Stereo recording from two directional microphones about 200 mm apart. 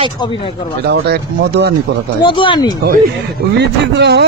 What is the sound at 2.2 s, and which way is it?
Speech, 25° left (ahead or behind).